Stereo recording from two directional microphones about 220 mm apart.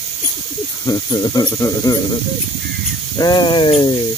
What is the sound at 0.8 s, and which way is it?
Speech, 20° left (ahead or behind).